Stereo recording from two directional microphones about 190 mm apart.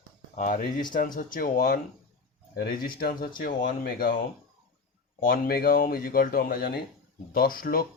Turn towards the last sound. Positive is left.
turn(degrees=50)  # may be behind; listen again after turning